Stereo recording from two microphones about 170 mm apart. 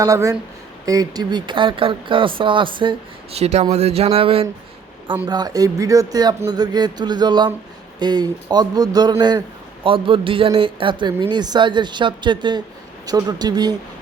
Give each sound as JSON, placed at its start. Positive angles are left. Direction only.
{"t": 0.0, "sound": "speech", "side_deg": -20}
{"t": 5.3, "sound": "speech", "side_deg": -25}